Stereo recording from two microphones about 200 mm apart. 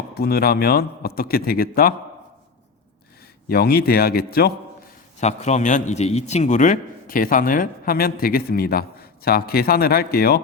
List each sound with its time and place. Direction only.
0.1 s a man's voice: 50° left (ahead or behind)
3.5 s a man's voice: 50° left (ahead or behind)
5.2 s a man's voice: 35° left (ahead or behind); by 10.4 s 50° left (ahead or behind)